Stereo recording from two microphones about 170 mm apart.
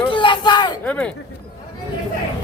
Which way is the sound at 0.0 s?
30° left (ahead or behind).